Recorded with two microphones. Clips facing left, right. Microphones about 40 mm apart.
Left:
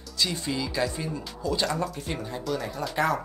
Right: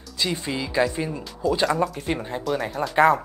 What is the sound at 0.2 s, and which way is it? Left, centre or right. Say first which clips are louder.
Speech: right 2 dB; right.